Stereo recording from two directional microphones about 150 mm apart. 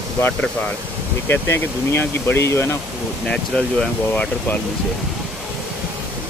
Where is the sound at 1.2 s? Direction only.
15° left (ahead or behind).